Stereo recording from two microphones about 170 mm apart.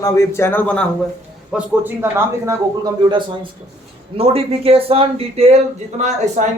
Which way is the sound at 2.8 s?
30° right (ahead or behind).